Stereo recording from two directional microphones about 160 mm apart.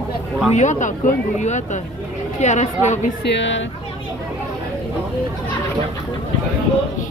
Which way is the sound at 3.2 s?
90° left.